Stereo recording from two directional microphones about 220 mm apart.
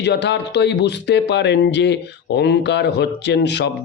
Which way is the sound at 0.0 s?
50° left (ahead or behind).